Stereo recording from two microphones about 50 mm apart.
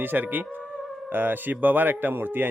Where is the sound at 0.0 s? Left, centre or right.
Right.